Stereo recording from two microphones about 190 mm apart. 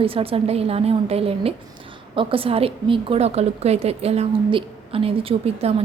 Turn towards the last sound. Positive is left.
turn(degrees=-30)  # may be behind; listen again after turning